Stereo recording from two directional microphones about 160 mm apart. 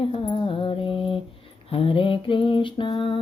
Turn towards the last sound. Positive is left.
turn(degrees=30)  # may be behind; listen again after turning